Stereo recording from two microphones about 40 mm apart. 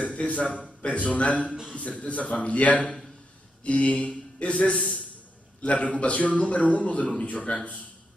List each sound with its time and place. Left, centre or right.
0.0 s a man's voice: left